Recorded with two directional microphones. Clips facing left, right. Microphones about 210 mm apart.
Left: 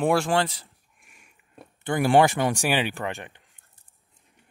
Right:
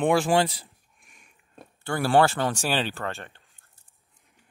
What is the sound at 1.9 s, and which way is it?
Speech, 15° left (ahead or behind).